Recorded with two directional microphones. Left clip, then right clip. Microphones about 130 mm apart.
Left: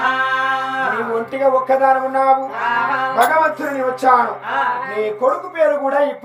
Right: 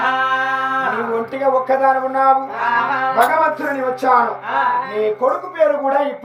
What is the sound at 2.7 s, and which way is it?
Music, 15° left (ahead or behind).